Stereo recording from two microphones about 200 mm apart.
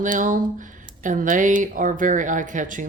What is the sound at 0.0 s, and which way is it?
Speech, 40° right (ahead or behind).